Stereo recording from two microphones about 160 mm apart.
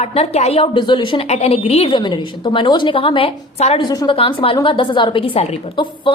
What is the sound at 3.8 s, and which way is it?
A woman's voice, 25° left (ahead or behind).